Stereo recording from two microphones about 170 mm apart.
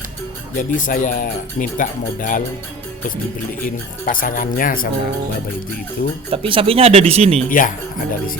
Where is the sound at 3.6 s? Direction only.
55° left (ahead or behind).